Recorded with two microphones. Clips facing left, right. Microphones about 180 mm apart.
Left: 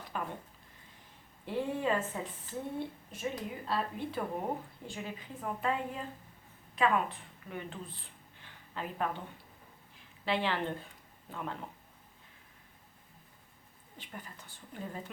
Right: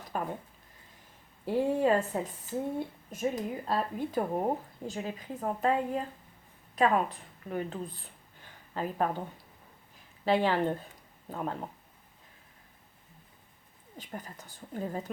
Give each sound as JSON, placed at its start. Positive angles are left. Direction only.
{"t": 0.1, "sound": "a sound", "side_deg": -40}
{"t": 1.5, "sound": "a woman's voice", "side_deg": -40}
{"t": 10.2, "sound": "a woman's voice", "side_deg": -45}
{"t": 14.0, "sound": "a woman's voice", "side_deg": -40}